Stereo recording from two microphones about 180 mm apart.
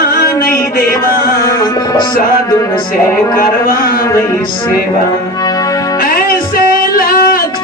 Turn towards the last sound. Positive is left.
turn(degrees=55)  # may be behind; listen again after turning